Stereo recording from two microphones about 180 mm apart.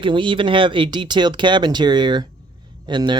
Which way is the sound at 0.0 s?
25° right (ahead or behind).